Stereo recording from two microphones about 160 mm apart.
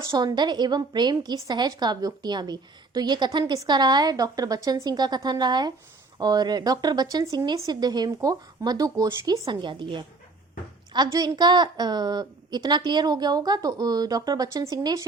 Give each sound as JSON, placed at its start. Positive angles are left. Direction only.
{"t": 0.1, "sound": "a woman's voice", "side_deg": -25}